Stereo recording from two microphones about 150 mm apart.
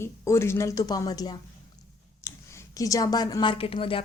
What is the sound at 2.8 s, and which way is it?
A woman's voice, 25° left (ahead or behind).